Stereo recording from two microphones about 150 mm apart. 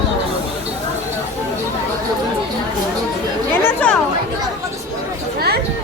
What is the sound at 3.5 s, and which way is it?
Chatter, 10° left (ahead or behind).